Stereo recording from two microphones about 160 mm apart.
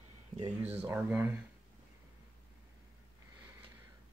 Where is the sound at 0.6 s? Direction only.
10° right (ahead or behind).